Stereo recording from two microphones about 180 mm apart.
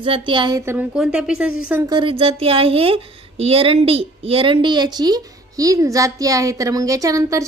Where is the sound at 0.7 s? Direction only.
5° right (ahead or behind).